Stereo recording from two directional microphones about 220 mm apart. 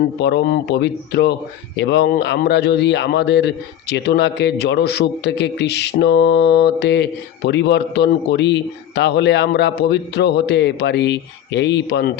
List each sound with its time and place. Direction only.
0.2 s a man's voice: 50° left (ahead or behind)